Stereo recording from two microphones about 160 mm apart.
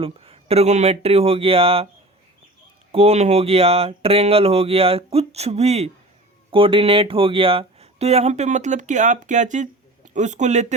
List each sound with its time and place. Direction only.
0.0 s speech: 40° right (ahead or behind)
2.9 s a man's voice: 40° right (ahead or behind)